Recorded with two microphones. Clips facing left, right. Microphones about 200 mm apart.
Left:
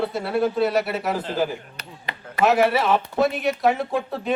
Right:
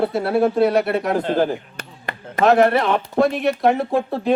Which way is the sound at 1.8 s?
50° right (ahead or behind).